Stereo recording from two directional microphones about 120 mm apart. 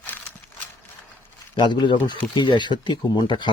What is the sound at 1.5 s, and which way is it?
Speech, 40° left (ahead or behind).